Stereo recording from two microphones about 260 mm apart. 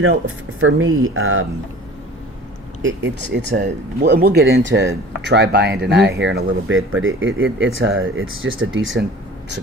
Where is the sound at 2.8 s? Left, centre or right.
Right.